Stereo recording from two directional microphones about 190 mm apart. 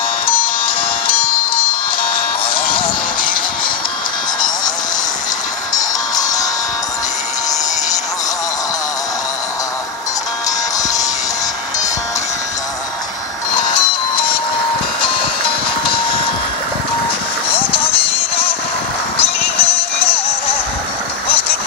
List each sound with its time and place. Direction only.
0.3 s music: 25° left (ahead or behind)
3.2 s music: 50° left (ahead or behind)
6.1 s music: 20° left (ahead or behind)
17.6 s music: 30° left (ahead or behind)